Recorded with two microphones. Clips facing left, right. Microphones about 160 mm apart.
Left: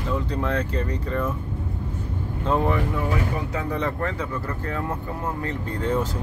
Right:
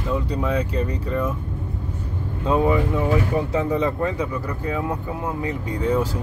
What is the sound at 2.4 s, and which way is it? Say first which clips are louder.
Speech: right 4 dB; 10° right (ahead or behind).